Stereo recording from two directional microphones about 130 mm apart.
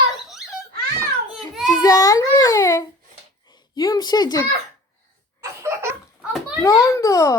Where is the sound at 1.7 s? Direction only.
30° left (ahead or behind).